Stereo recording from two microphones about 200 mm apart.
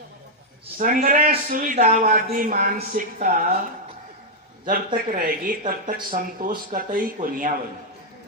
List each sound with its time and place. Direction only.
0.7 s a man's voice: 45° right (ahead or behind)
4.6 s a man's voice: 45° right (ahead or behind)